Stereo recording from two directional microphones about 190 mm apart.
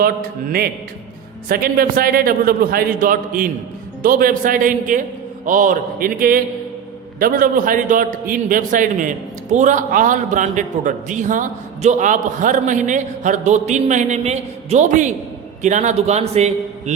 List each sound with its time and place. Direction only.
0.0 s a man's voice: 50° right (ahead or behind); by 16.9 s 35° right (ahead or behind)